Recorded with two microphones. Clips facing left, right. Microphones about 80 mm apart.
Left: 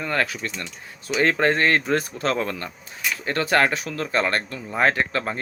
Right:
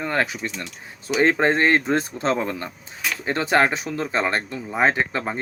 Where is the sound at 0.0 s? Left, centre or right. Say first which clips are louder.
Right 1 dB; right.